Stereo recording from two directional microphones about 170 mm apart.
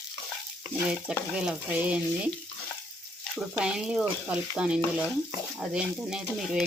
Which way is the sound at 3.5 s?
5° right (ahead or behind).